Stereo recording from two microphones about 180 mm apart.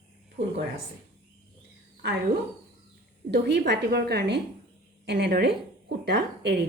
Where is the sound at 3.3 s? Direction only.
65° right (ahead or behind).